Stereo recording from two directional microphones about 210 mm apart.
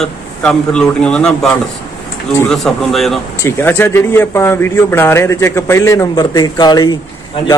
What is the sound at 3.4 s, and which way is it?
Speech, 10° left (ahead or behind).